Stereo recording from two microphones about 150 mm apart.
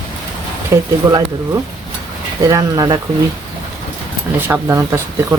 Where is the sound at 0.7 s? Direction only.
20° right (ahead or behind).